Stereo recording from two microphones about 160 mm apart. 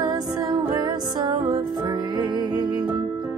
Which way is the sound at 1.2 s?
30° right (ahead or behind).